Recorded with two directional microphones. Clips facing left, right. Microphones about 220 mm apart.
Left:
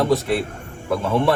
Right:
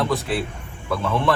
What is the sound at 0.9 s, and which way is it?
Speech, 15° left (ahead or behind).